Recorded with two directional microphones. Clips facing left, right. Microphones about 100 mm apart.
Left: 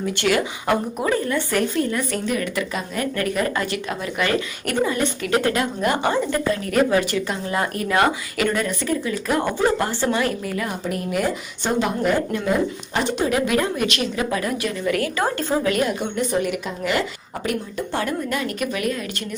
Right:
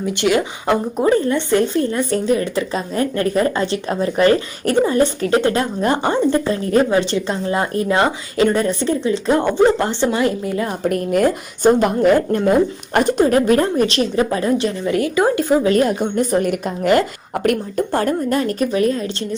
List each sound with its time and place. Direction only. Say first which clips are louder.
0.0 s a woman's voice: right 4 dB; 20° right (ahead or behind)
10.8 s a woman's voice: right 8 dB; 50° right (ahead or behind); by 15.6 s 15° right (ahead or behind)
15.6 s a woman's voice: right 6 dB; 35° right (ahead or behind)